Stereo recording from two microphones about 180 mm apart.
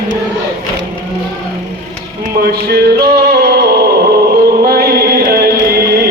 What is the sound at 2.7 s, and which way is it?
Music, 60° right (ahead or behind).